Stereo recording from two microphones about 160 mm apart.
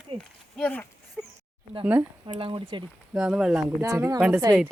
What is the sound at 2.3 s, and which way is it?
Speech, 35° right (ahead or behind).